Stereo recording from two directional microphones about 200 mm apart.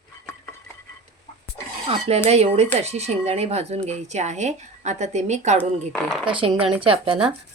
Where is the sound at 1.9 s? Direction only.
30° right (ahead or behind).